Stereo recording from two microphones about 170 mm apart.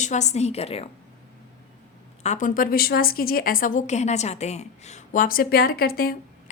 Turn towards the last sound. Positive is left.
turn(degrees=60)  # may be behind; listen again after turning